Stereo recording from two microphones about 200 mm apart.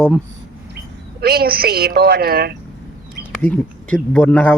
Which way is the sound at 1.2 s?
50° right (ahead or behind).